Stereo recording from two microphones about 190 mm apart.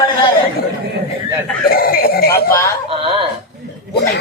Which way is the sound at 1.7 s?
50° left (ahead or behind).